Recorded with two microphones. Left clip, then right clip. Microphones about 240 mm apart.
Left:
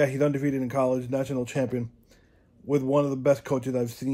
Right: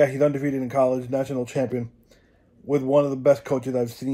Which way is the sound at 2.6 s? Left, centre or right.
Centre.